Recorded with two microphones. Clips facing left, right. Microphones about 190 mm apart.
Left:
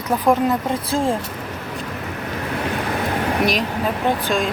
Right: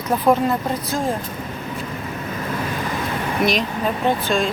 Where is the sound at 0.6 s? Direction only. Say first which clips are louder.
Left 2 dB; 30° left (ahead or behind).